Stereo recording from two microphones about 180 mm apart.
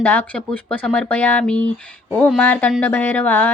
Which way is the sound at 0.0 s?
10° left (ahead or behind).